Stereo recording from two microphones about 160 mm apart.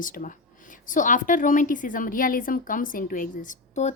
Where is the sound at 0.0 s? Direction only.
55° left (ahead or behind).